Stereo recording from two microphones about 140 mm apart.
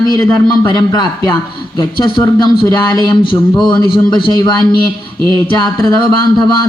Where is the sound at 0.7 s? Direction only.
30° left (ahead or behind).